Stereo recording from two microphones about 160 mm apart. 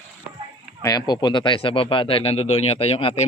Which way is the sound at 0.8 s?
25° left (ahead or behind).